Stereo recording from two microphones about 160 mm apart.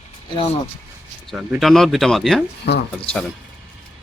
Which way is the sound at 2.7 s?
90° left.